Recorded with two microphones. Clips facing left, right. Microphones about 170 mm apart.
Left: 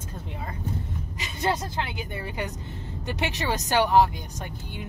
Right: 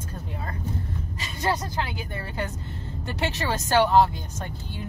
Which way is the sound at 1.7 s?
20° left (ahead or behind).